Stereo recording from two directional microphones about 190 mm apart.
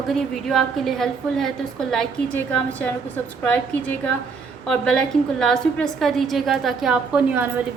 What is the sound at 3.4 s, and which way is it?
A woman's voice, 5° left (ahead or behind).